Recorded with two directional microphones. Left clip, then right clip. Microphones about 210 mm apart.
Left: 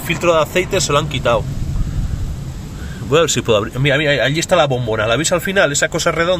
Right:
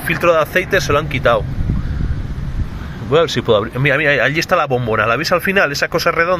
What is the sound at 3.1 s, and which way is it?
Speech, 10° left (ahead or behind).